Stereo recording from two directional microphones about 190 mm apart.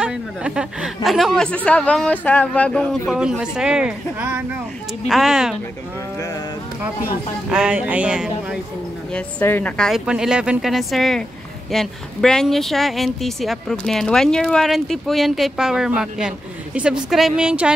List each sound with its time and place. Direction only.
0.0 s a woman's voice: 5° right (ahead or behind)
6.1 s a sound: 15° left (ahead or behind)
7.5 s a woman's voice: 5° right (ahead or behind)
9.1 s a woman's voice: 10° left (ahead or behind)